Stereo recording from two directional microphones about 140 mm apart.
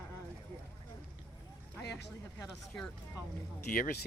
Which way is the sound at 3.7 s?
90° left.